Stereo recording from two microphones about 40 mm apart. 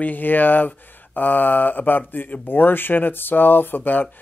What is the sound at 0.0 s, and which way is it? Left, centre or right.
Speech, left.